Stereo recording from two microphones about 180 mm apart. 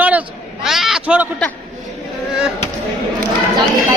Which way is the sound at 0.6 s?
Centre (ahead or behind).